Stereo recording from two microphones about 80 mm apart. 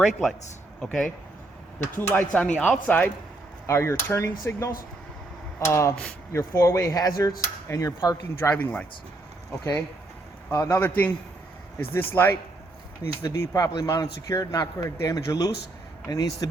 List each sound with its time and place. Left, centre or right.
0.0 s a man's voice: centre
1.8 s speech: left
2.4 s speech: centre
3.7 s speech: left
8.4 s speech: left
10.8 s speech: left